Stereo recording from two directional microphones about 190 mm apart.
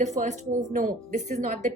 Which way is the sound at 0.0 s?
40° right (ahead or behind).